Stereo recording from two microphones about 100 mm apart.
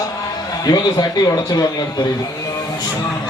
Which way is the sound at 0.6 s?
40° left (ahead or behind).